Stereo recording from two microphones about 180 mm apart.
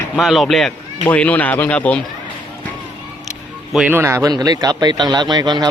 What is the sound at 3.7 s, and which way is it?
A man's voice, 10° right (ahead or behind).